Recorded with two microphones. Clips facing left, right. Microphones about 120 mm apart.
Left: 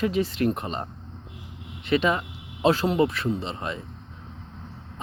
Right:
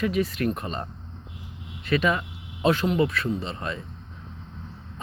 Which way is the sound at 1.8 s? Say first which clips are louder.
Left 1 dB; 25° left (ahead or behind).